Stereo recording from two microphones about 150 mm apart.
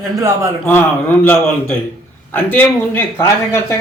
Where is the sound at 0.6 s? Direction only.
15° left (ahead or behind).